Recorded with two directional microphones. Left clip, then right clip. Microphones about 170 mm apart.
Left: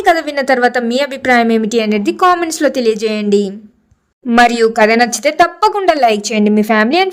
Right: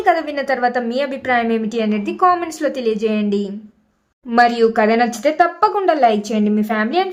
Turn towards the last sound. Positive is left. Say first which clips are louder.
# left 7 dB
turn(degrees=45)  # may be behind; listen again after turning